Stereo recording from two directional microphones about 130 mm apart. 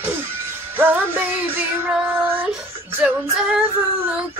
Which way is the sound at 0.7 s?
15° right (ahead or behind).